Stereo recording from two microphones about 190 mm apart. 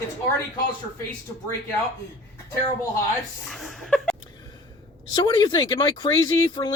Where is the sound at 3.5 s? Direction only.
Centre (ahead or behind).